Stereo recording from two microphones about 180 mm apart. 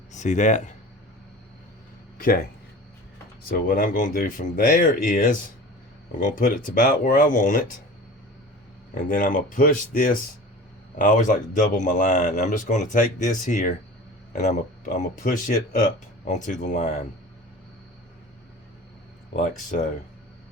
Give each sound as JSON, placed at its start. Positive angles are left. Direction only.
{"t": 0.1, "sound": "speech", "side_deg": 40}
{"t": 3.5, "sound": "speech", "side_deg": 50}
{"t": 9.0, "sound": "speech", "side_deg": 50}
{"t": 19.5, "sound": "speech", "side_deg": 45}